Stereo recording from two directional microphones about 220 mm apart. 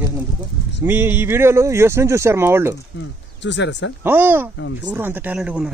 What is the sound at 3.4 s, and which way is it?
Speech, 55° left (ahead or behind).